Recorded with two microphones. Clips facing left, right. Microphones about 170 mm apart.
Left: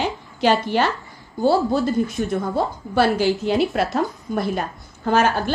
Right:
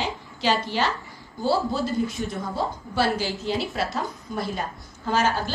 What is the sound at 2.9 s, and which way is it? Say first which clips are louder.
A woman's voice: left 7 dB; 55° left (ahead or behind).